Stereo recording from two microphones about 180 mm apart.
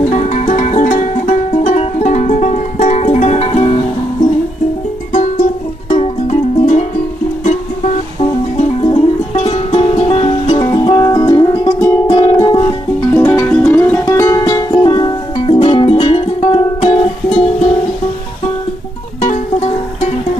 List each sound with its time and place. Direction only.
0.1 s music: 40° left (ahead or behind)
5.9 s music: 35° left (ahead or behind)
8.5 s music: 35° left (ahead or behind)
13.2 s music: 10° left (ahead or behind); by 17.4 s 30° left (ahead or behind)